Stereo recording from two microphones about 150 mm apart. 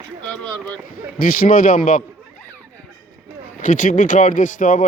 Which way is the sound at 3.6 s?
60° left (ahead or behind).